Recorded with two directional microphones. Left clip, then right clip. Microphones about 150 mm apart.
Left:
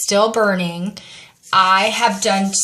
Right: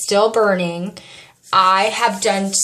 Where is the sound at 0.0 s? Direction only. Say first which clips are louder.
Even; 5° right (ahead or behind).